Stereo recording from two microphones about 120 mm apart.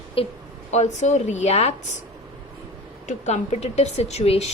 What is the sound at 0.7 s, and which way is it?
Speech, 75° left (ahead or behind).